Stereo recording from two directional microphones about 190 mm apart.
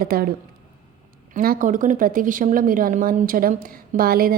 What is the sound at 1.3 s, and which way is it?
A woman's voice, 45° right (ahead or behind).